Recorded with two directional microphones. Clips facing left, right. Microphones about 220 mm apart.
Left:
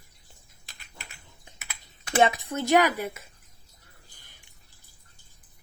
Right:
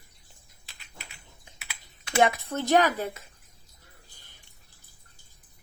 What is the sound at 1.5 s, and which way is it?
Typing, 50° left (ahead or behind).